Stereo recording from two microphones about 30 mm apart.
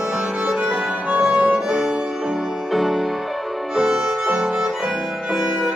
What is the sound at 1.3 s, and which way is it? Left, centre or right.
Violin, right.